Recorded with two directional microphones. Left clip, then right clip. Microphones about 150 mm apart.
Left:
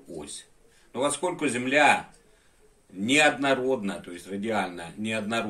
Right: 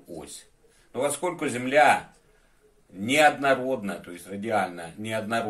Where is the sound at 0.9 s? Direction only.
50° right (ahead or behind).